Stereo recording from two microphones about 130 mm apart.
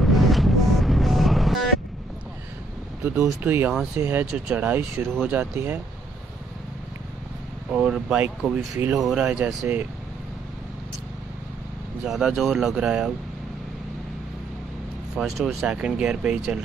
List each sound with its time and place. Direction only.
0.0 s vehicle: centre (ahead or behind)
3.3 s speech: 15° right (ahead or behind)
7.7 s speech: 5° right (ahead or behind)
12.0 s speech: centre (ahead or behind)
15.1 s speech: centre (ahead or behind)